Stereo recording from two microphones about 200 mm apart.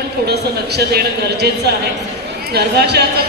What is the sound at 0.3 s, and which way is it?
Speech, 55° right (ahead or behind).